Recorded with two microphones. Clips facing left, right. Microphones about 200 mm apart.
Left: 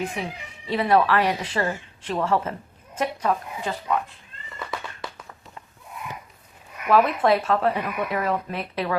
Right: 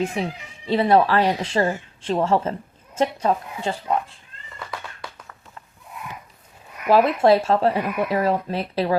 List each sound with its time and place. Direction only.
0.2 s speech: 30° right (ahead or behind)
6.8 s speech: 30° right (ahead or behind)